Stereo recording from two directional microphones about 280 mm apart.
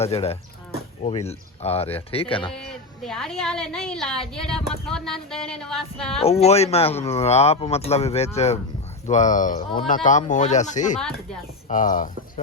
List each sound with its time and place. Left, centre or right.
0.0 s speech: left
2.5 s a woman's voice: centre
6.1 s speech: left